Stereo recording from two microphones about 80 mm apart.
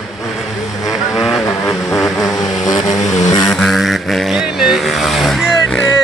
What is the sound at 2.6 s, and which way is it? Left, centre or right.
Vehicle, left.